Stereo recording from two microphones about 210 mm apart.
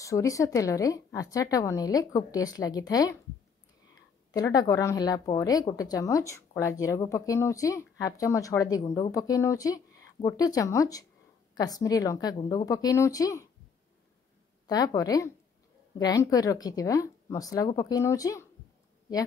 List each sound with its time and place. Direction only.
0.0 s a woman's voice: 15° left (ahead or behind)
4.3 s a woman's voice: 15° left (ahead or behind)
14.7 s a woman's voice: 20° left (ahead or behind)